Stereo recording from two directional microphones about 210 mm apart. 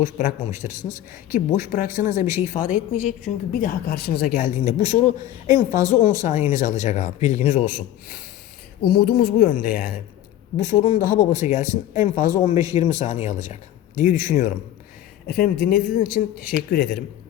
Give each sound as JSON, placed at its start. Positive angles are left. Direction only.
{"t": 0.0, "sound": "a woman's voice", "side_deg": 35}
{"t": 15.3, "sound": "speech", "side_deg": 50}